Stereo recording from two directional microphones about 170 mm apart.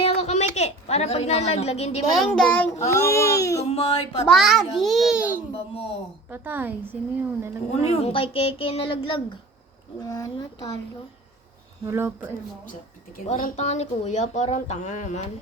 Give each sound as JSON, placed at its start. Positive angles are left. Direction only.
{"t": 0.0, "sound": "a sound", "side_deg": 40}
{"t": 2.1, "sound": "a child's voice", "side_deg": 5}
{"t": 3.7, "sound": "a woman's voice", "side_deg": 35}
{"t": 4.3, "sound": "a child's voice", "side_deg": 0}
{"t": 6.3, "sound": "speech", "side_deg": -10}
{"t": 7.7, "sound": "a woman's voice", "side_deg": 40}
{"t": 11.9, "sound": "speech", "side_deg": -15}
{"t": 13.2, "sound": "speech", "side_deg": 45}